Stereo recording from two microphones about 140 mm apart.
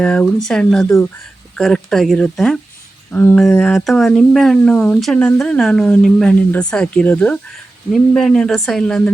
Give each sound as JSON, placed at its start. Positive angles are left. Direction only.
{"t": 0.0, "sound": "speech", "side_deg": 5}
{"t": 3.1, "sound": "a sound", "side_deg": 15}
{"t": 3.6, "sound": "speech", "side_deg": 0}